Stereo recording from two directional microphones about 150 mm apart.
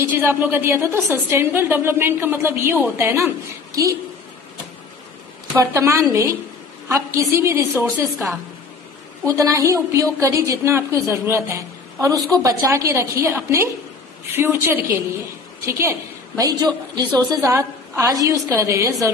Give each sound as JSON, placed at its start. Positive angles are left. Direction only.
{"t": 0.0, "sound": "a woman's voice", "side_deg": -15}
{"t": 5.6, "sound": "a woman's voice", "side_deg": -20}
{"t": 9.2, "sound": "a woman's voice", "side_deg": -20}